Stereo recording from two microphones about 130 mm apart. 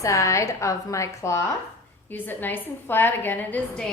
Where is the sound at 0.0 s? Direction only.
25° left (ahead or behind).